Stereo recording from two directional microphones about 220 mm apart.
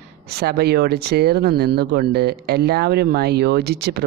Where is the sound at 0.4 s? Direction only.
45° right (ahead or behind).